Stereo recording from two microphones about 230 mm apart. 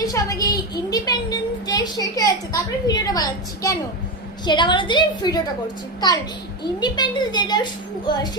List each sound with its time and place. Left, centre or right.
0.0 s a sound: centre
4.4 s a woman's voice: centre
6.7 s a woman's voice: centre